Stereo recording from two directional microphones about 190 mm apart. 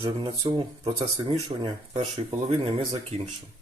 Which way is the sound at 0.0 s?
25° right (ahead or behind).